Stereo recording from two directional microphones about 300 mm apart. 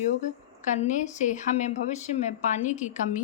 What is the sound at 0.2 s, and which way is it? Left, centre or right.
A woman's voice, left.